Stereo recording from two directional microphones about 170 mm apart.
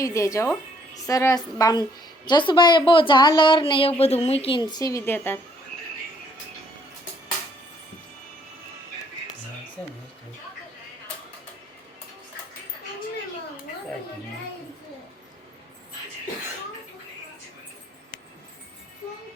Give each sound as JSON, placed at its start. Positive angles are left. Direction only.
{"t": 0.0, "sound": "a woman's voice", "side_deg": 20}